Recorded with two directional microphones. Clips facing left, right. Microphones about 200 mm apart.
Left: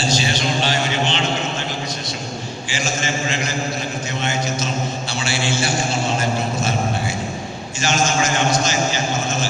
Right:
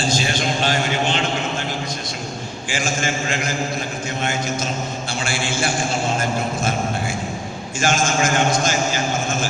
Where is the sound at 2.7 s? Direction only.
50° right (ahead or behind).